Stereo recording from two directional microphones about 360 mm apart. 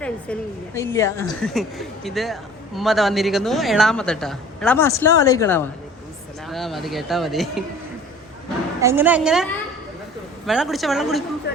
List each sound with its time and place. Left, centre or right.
0.0 s a woman's voice: centre
8.8 s a woman's voice: centre
11.5 s speech: left